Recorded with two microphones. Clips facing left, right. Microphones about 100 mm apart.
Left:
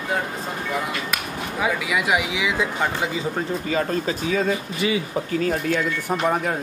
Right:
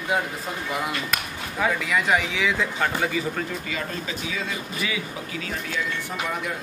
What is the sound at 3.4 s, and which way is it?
Speech, 40° left (ahead or behind).